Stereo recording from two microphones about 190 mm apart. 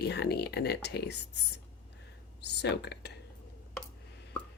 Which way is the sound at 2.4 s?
65° left (ahead or behind).